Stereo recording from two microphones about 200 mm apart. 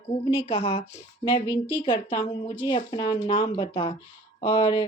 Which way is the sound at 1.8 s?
25° left (ahead or behind).